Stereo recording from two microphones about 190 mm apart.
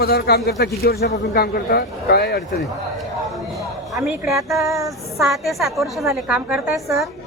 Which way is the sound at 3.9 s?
Centre (ahead or behind).